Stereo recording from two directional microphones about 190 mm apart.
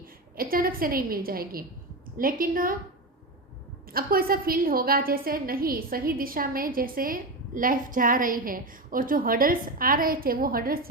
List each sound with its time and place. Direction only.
0.0 s a woman's voice: 50° right (ahead or behind)
3.8 s a woman's voice: 50° right (ahead or behind)